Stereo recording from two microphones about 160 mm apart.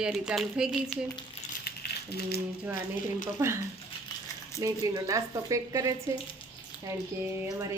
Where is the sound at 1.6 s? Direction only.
85° left.